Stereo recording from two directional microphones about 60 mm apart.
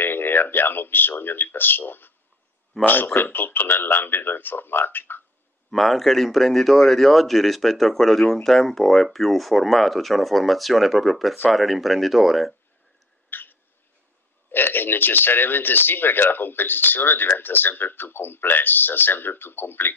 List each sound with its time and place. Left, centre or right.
0.0 s speech: left
5.7 s speech: centre
13.3 s a sound: left
14.5 s speech: left